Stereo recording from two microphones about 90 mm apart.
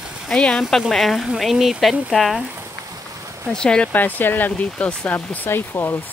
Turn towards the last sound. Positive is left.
turn(degrees=25)  # may be behind; listen again after turning